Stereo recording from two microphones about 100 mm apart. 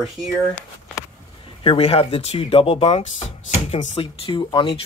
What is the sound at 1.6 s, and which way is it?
Speech, 75° left (ahead or behind).